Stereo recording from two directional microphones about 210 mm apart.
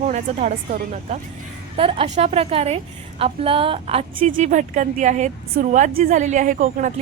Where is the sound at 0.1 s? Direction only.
35° right (ahead or behind).